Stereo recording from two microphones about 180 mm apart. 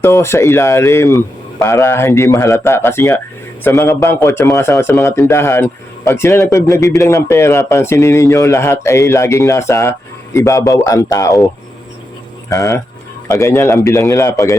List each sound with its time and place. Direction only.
0.0 s a man's voice: 15° left (ahead or behind)
12.5 s a man's voice: 15° left (ahead or behind)